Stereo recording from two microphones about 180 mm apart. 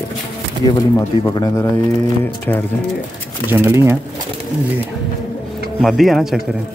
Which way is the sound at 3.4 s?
10° right (ahead or behind).